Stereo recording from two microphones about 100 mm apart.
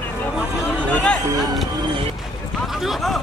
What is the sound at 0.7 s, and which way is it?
Chatter, 10° left (ahead or behind).